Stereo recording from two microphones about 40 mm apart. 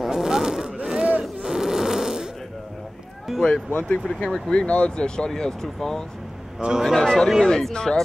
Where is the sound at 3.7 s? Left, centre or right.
Left.